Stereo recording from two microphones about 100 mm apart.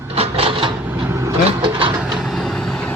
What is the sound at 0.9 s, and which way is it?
Vehicle, 25° right (ahead or behind).